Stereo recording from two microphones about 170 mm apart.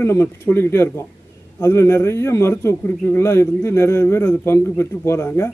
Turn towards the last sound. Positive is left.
turn(degrees=15)  # may be behind; listen again after turning